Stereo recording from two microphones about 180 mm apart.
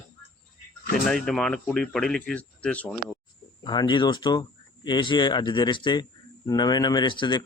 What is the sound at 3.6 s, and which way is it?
A man's voice, 25° left (ahead or behind).